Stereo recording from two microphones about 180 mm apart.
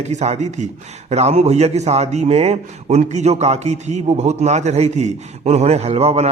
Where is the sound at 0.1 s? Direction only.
40° right (ahead or behind).